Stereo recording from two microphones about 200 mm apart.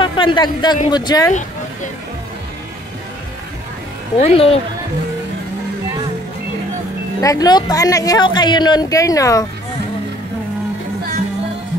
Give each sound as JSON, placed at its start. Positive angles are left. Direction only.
{"t": 0.0, "sound": "a man's voice", "side_deg": 25}
{"t": 4.2, "sound": "speech", "side_deg": 30}
{"t": 7.2, "sound": "speech", "side_deg": 15}